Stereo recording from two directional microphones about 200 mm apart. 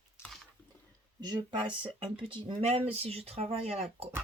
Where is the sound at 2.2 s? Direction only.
30° right (ahead or behind).